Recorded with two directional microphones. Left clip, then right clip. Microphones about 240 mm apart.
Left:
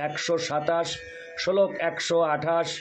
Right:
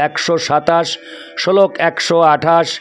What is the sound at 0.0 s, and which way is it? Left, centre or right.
A man's voice, right.